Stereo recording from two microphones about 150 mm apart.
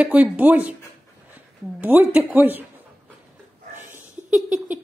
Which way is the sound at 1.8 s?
10° right (ahead or behind).